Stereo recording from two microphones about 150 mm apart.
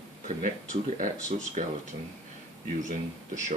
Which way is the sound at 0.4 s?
60° right (ahead or behind).